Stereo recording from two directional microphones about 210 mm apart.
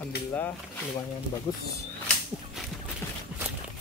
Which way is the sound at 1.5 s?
20° left (ahead or behind).